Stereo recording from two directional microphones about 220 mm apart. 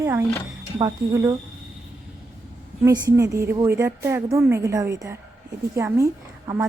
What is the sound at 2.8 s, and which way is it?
Speech, 15° right (ahead or behind).